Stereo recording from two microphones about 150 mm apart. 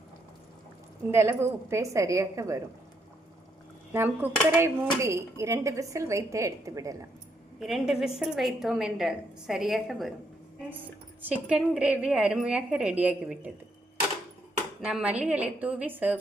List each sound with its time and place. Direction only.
1.1 s speech: 15° right (ahead or behind)
3.9 s speech: 15° right (ahead or behind)
7.6 s a woman's voice: centre (ahead or behind)
11.2 s a woman's voice: 10° right (ahead or behind)
14.8 s a woman's voice: 5° right (ahead or behind)